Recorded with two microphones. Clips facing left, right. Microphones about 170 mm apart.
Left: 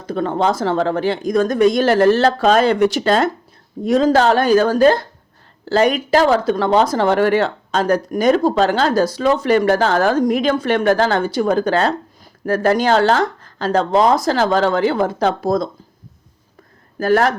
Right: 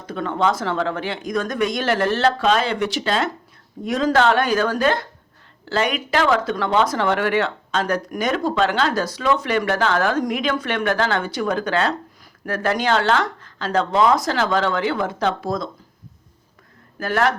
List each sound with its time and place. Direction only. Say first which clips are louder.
0.0 s speech: left 3 dB; 35° left (ahead or behind)
3.8 s speech: left 4 dB; 30° left (ahead or behind)
17.0 s speech: left 5 dB; 40° left (ahead or behind)